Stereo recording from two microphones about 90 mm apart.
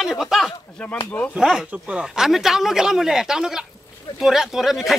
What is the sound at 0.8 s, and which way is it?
Speech, 10° left (ahead or behind).